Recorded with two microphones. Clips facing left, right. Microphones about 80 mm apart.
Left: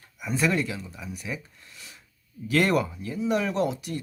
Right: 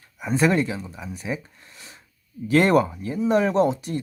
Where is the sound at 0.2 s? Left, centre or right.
Right.